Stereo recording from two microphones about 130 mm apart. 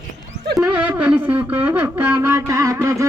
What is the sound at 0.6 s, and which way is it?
Music, 10° right (ahead or behind).